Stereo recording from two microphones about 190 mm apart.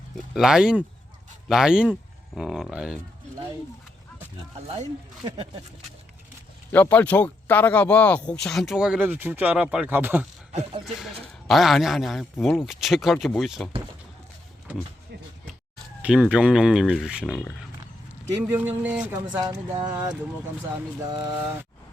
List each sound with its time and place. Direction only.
0.3 s speech: 5° right (ahead or behind)
4.7 s speech: 30° right (ahead or behind)
6.7 s speech: 10° left (ahead or behind); by 10.2 s 10° right (ahead or behind)
10.5 s speech: 35° right (ahead or behind)
10.8 s speech: centre (ahead or behind)
16.0 s speech: 5° right (ahead or behind)
19.3 s speech: 20° right (ahead or behind)
19.9 s speech: 10° right (ahead or behind)
21.2 s speech: 10° right (ahead or behind)